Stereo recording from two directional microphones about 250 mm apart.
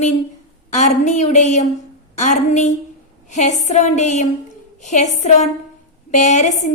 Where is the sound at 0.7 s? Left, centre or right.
Left.